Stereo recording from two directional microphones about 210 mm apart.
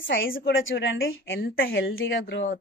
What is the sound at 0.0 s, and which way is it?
A woman's voice, 65° left (ahead or behind).